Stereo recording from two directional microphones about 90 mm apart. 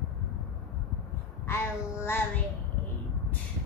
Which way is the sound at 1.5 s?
25° left (ahead or behind).